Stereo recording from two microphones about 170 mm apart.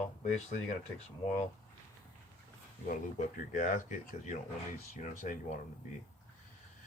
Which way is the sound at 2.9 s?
50° left (ahead or behind).